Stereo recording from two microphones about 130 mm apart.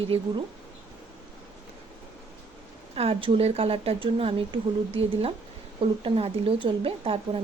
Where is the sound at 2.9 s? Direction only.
45° right (ahead or behind).